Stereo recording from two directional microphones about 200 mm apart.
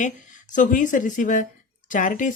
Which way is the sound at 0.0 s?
40° left (ahead or behind).